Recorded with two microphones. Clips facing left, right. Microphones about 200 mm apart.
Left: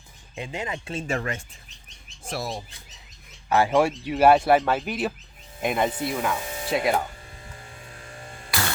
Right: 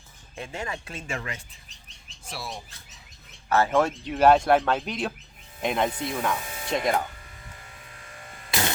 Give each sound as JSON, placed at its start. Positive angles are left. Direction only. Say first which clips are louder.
{"t": 0.3, "sound": "speech", "louder": "left 2 dB", "side_deg": 15}
{"t": 1.0, "sound": "speech", "louder": "left 7 dB", "side_deg": 45}
{"t": 3.5, "sound": "speech", "louder": "left 2 dB", "side_deg": 15}
{"t": 7.9, "sound": "a sound", "louder": "left 4 dB", "side_deg": 30}
{"t": 8.4, "sound": "music", "louder": "right 1 dB", "side_deg": -20}